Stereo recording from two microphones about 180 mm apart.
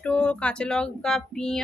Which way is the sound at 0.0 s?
5° left (ahead or behind).